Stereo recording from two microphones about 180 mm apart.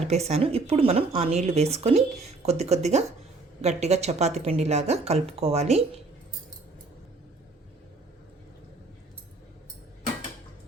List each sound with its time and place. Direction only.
0.1 s speech: 35° right (ahead or behind)